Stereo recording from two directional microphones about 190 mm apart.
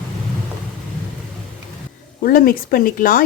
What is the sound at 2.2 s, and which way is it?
A woman's voice, 45° left (ahead or behind).